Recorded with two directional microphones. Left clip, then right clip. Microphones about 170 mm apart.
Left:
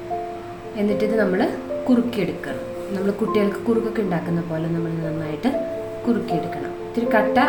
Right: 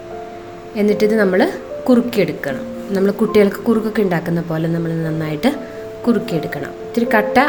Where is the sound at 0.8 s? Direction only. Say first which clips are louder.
Right 6 dB; 45° right (ahead or behind).